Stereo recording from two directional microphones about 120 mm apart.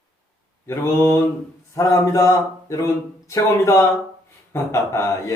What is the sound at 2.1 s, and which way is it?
Speech, 25° left (ahead or behind).